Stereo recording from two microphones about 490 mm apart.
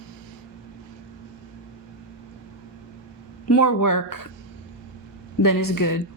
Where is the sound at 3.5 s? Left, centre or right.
Left.